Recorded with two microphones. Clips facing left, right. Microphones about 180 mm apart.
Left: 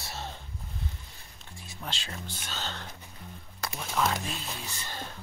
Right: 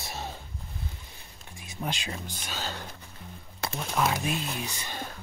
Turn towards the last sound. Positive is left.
turn(degrees=-15)  # may be behind; listen again after turning